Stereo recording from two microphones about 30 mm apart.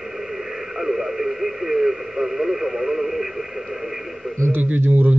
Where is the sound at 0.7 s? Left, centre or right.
Centre.